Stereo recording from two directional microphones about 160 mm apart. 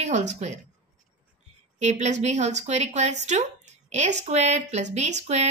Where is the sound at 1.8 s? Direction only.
45° right (ahead or behind).